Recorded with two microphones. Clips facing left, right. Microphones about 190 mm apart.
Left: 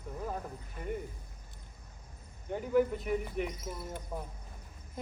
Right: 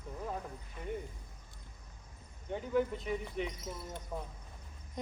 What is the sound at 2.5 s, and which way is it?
Speech, 5° left (ahead or behind).